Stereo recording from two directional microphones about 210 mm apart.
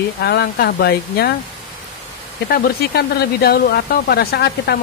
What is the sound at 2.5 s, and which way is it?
Speech, 50° left (ahead or behind).